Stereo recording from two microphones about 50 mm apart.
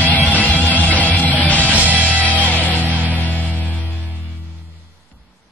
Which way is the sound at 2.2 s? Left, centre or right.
Left.